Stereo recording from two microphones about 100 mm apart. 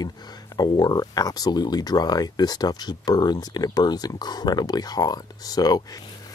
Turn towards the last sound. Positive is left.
turn(degrees=40)  # may be behind; listen again after turning